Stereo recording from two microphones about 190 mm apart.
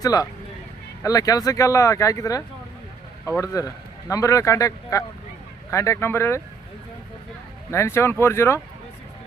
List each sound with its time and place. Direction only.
0.0 s speech: 20° left (ahead or behind)
7.7 s speech: 15° left (ahead or behind)